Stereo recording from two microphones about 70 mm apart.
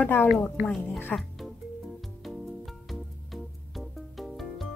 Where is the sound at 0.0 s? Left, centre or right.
Left.